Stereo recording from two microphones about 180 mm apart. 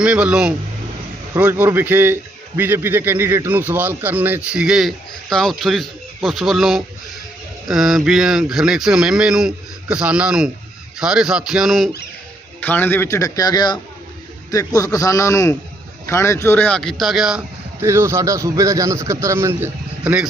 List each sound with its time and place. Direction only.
0.0 s a man's voice: 5° right (ahead or behind)
12.5 s a man's voice: 10° left (ahead or behind); by 20.2 s 10° right (ahead or behind)